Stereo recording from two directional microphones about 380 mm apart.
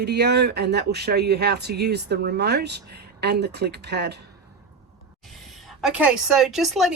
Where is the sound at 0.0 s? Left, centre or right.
Right.